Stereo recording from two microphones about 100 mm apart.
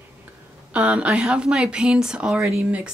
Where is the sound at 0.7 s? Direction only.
10° right (ahead or behind).